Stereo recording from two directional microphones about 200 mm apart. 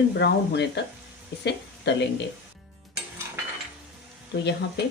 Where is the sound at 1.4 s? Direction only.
60° left (ahead or behind).